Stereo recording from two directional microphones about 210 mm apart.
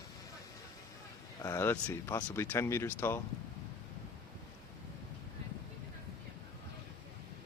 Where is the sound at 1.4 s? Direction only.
15° left (ahead or behind).